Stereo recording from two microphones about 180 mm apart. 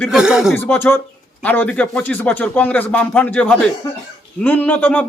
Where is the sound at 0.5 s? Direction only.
10° left (ahead or behind).